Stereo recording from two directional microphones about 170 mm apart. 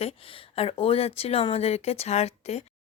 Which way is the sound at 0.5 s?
35° left (ahead or behind).